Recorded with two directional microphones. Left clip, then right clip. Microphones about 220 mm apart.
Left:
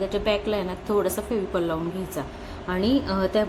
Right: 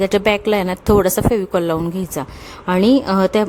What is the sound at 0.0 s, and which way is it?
Speech, 50° right (ahead or behind).